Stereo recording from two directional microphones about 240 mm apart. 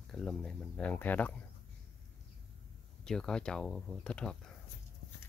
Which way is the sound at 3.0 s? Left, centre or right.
Centre.